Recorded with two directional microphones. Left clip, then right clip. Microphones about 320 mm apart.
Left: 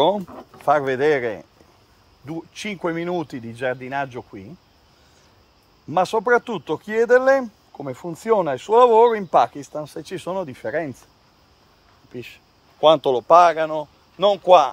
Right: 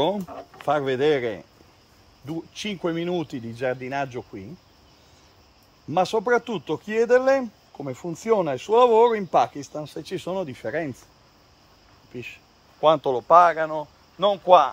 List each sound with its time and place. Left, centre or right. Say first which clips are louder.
0.7 s speech: left 4 dB; centre
2.5 s speech: left 2 dB; centre
5.9 s speech: left 3 dB; centre
12.1 s speech: left 1 dB; centre
12.8 s a man's voice: left 4 dB; left